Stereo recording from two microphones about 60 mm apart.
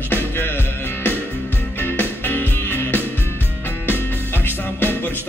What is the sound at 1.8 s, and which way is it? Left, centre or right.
Music, left.